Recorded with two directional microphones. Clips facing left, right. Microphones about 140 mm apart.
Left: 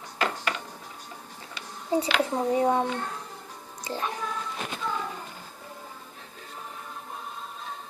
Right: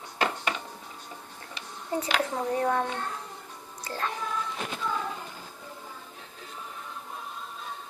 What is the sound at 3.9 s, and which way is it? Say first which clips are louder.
Speech: left 1 dB; 15° left (ahead or behind).